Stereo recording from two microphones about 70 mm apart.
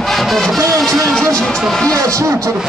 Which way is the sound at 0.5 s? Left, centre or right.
Right.